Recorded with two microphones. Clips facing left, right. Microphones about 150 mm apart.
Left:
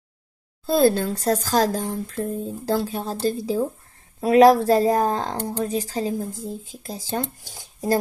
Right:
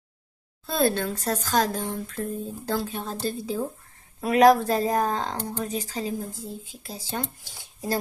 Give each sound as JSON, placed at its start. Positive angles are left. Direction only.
{"t": 0.7, "sound": "speech", "side_deg": 30}